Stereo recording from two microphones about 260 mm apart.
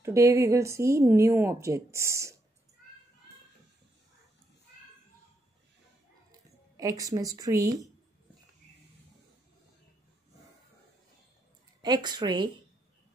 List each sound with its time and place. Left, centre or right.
0.0 s speech: centre
6.8 s speech: centre
11.8 s speech: centre